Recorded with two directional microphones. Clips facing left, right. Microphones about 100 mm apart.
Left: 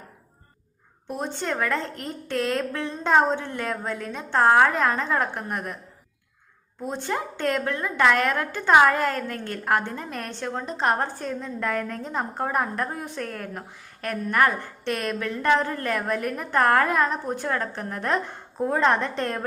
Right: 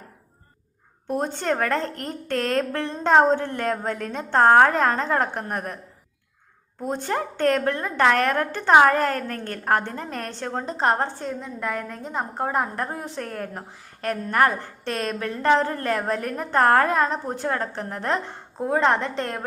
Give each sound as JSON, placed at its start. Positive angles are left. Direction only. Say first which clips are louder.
{"t": 1.1, "sound": "a woman's voice", "louder": "right 4 dB", "side_deg": -45}
{"t": 3.0, "sound": "a woman's voice", "louder": "right 3 dB", "side_deg": -40}
{"t": 6.9, "sound": "a woman's voice", "louder": "right 3 dB", "side_deg": -45}